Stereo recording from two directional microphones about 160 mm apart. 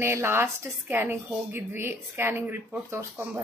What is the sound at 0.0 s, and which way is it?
Speech, 15° right (ahead or behind).